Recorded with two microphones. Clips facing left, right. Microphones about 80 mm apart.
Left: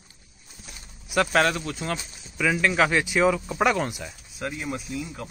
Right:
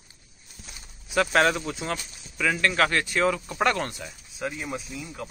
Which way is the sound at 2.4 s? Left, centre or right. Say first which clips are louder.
Left 1 dB; centre.